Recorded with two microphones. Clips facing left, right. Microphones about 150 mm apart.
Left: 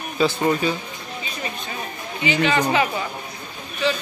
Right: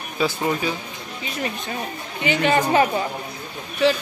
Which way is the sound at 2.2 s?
55° right (ahead or behind).